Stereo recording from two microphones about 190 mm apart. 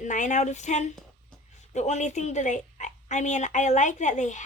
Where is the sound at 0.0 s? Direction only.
40° left (ahead or behind).